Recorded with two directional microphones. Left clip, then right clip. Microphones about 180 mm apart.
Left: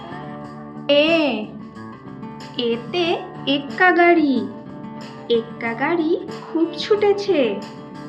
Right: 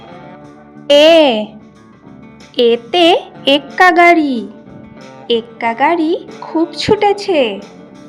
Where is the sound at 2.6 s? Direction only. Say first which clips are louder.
Right 11 dB; 50° right (ahead or behind).